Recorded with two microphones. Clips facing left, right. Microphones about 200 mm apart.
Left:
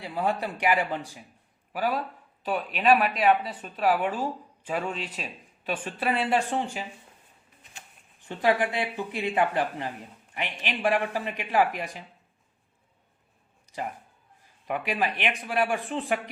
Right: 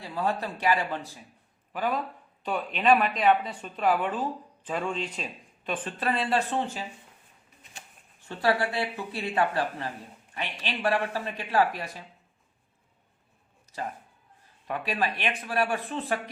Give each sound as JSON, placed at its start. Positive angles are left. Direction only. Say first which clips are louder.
{"t": 0.0, "sound": "a woman's voice", "louder": "left 1 dB", "side_deg": 15}
{"t": 8.2, "sound": "a woman's voice", "louder": "left 2 dB", "side_deg": 15}
{"t": 13.7, "sound": "a sound", "louder": "left 2 dB", "side_deg": 15}
{"t": 14.7, "sound": "a woman's voice", "louder": "left 1 dB", "side_deg": 15}